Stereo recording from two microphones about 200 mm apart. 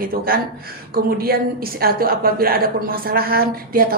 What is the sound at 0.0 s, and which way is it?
A woman's voice, 45° right (ahead or behind).